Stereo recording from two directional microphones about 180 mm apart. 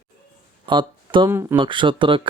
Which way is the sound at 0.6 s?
25° right (ahead or behind).